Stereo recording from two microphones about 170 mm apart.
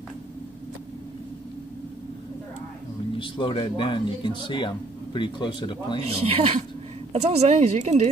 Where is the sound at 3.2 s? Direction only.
30° left (ahead or behind).